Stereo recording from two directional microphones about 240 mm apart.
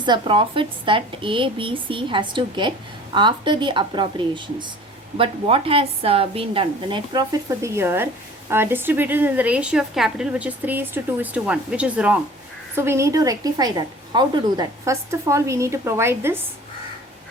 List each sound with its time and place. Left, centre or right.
0.0 s a woman's voice: centre